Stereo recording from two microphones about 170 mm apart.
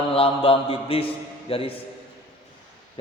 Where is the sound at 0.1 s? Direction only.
35° left (ahead or behind).